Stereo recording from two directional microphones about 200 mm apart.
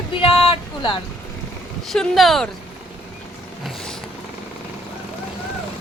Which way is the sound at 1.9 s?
Centre (ahead or behind).